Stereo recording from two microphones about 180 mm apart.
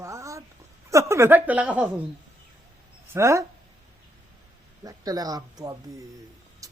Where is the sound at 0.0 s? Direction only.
15° right (ahead or behind).